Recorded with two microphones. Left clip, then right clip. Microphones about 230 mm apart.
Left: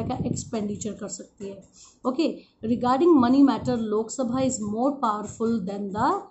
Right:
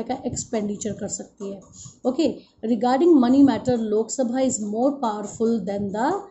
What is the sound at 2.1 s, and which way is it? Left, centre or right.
Speech, left.